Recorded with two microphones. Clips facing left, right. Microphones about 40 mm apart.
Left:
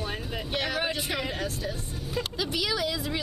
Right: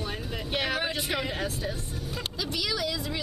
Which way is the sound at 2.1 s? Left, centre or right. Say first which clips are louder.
Left 4 dB; centre.